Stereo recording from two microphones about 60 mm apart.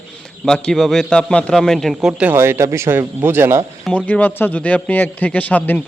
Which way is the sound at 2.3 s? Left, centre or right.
Right.